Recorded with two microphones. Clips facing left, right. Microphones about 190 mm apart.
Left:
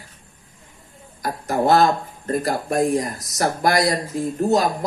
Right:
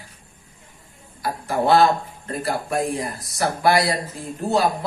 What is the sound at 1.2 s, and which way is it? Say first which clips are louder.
Speech: left 1 dB; 45° left (ahead or behind).